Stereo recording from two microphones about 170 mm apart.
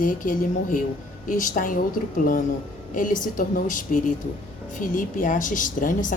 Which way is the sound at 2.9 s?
50° left (ahead or behind).